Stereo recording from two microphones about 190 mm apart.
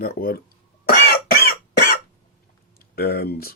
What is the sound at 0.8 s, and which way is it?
Cough, 55° left (ahead or behind).